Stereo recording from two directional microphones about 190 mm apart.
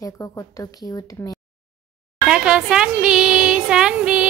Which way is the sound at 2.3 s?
5° right (ahead or behind).